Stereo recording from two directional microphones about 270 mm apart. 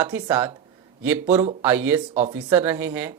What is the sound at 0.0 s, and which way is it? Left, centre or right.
Speech, centre.